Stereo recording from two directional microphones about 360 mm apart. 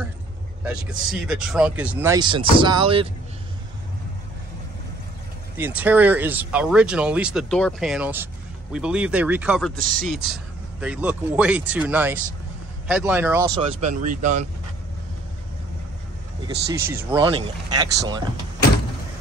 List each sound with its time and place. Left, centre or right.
1.2 s speech: centre
5.6 s speech: centre
9.8 s speech: right
10.0 s speech: centre
13.7 s speech: right
16.4 s speech: centre